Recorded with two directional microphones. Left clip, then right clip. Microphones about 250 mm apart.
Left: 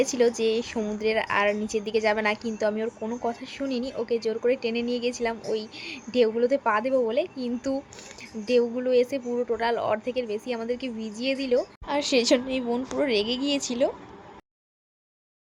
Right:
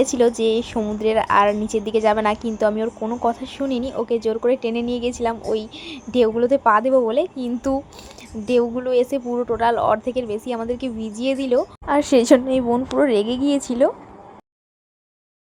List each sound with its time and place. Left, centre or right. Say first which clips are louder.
0.2 s a woman's voice: right 5 dB; centre